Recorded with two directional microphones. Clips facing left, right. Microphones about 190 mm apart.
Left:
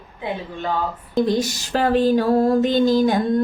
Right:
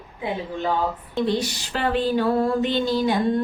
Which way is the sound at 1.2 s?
45° left (ahead or behind).